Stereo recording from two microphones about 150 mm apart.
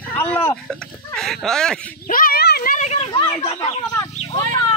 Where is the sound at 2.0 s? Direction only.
70° left (ahead or behind).